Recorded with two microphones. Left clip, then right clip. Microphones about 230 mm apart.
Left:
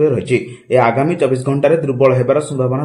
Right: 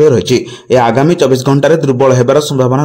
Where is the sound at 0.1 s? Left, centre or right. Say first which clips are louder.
Right 6 dB; right.